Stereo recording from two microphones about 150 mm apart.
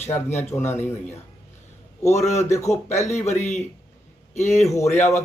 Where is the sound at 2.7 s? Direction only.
45° left (ahead or behind).